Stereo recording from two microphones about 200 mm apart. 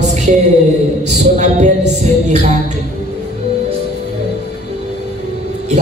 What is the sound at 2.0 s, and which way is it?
Music, 35° right (ahead or behind).